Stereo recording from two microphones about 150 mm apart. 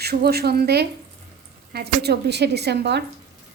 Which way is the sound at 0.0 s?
90° right.